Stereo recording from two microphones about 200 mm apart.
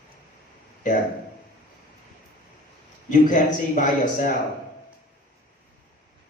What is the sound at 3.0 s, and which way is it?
A man's voice, 40° left (ahead or behind).